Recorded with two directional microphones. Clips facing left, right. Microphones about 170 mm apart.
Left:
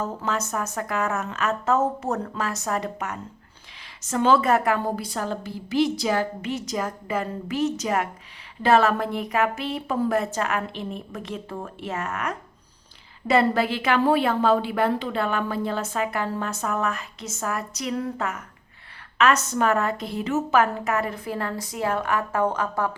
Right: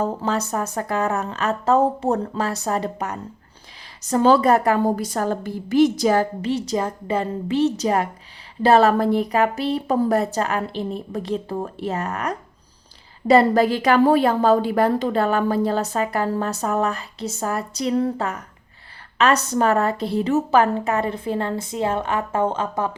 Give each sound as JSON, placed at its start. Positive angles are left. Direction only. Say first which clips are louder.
{"t": 0.0, "sound": "a woman's voice", "louder": "right 5 dB", "side_deg": -35}